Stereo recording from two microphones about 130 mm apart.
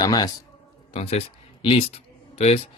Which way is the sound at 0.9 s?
55° left (ahead or behind).